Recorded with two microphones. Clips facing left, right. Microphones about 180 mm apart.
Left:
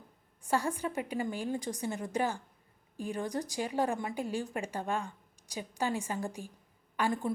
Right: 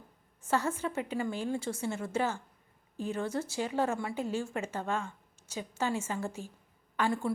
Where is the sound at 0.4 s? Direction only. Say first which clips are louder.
Right 1 dB; 15° left (ahead or behind).